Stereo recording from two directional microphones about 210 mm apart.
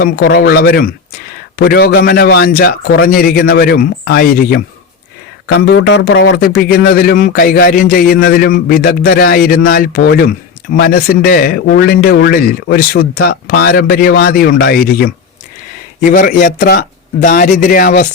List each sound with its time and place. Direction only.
0.0 s speech: 50° left (ahead or behind)